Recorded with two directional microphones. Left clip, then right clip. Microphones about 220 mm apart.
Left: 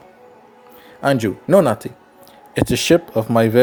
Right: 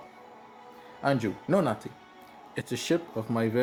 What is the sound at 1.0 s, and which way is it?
Speech, 40° left (ahead or behind).